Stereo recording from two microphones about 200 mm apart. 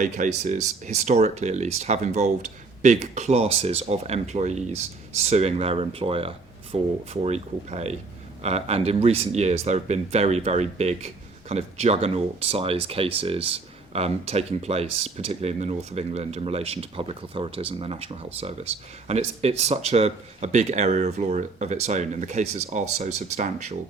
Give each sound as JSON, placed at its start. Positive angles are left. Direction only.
{"t": 0.0, "sound": "speech", "side_deg": -40}